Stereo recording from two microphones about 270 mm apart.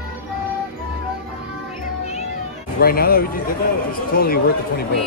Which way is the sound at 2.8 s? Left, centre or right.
Left.